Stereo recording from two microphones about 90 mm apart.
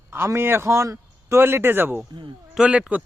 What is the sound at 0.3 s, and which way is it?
Speech, 25° right (ahead or behind).